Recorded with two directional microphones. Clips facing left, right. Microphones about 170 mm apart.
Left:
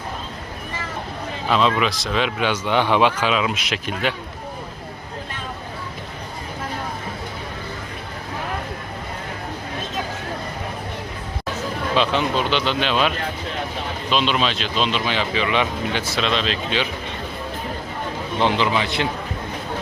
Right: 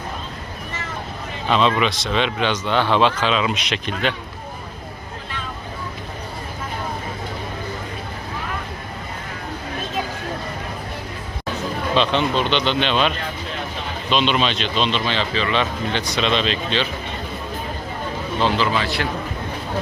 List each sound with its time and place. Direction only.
1.5 s speech: 5° left (ahead or behind)
11.9 s a man's voice: 5° left (ahead or behind)
18.3 s a man's voice: 20° left (ahead or behind)